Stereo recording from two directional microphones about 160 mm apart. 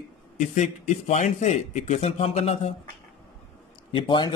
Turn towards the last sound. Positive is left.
turn(degrees=30)  # may be behind; listen again after turning